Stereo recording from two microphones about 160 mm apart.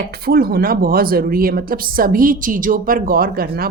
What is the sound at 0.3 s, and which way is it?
Speech, 70° right (ahead or behind).